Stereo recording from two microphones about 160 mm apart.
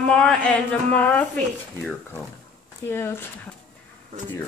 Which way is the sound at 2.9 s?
15° left (ahead or behind).